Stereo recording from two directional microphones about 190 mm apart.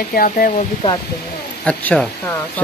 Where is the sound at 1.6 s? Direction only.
5° left (ahead or behind).